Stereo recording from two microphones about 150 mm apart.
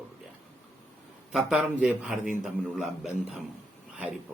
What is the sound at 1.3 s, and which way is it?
Speech, 5° right (ahead or behind).